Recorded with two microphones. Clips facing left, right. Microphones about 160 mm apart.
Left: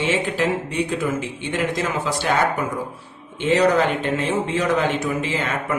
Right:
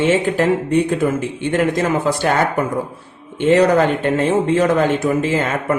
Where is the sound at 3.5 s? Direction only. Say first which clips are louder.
Right 4 dB; 50° right (ahead or behind).